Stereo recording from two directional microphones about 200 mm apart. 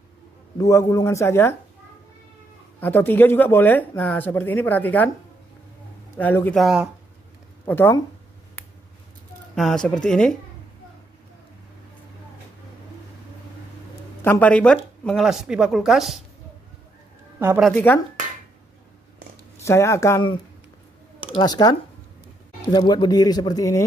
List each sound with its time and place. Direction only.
0.6 s speech: 15° left (ahead or behind)
2.8 s speech: 10° left (ahead or behind)
6.1 s speech: 10° left (ahead or behind)
7.6 s speech: 10° left (ahead or behind)
9.6 s speech: centre (ahead or behind)
14.2 s speech: 10° left (ahead or behind)
17.4 s a woman's voice: 10° right (ahead or behind)
17.6 s speech: 5° left (ahead or behind)
19.6 s a man's voice: 15° left (ahead or behind)